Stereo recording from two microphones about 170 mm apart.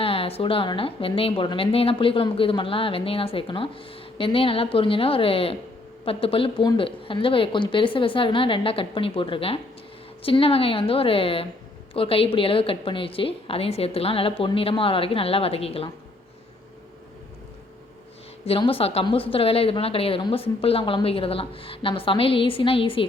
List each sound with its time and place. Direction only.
0.0 s speech: 35° left (ahead or behind)
18.4 s speech: 35° left (ahead or behind)